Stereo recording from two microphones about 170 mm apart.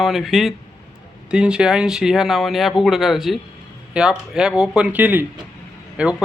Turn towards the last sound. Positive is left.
turn(degrees=-5)  # may be behind; listen again after turning